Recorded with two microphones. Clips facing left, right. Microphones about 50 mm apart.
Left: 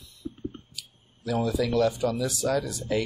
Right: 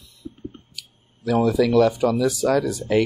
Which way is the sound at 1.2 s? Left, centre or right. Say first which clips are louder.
Right 8 dB; right.